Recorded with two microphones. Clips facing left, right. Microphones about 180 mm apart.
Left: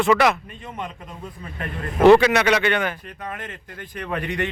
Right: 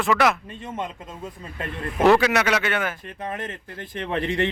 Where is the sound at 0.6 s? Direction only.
20° right (ahead or behind).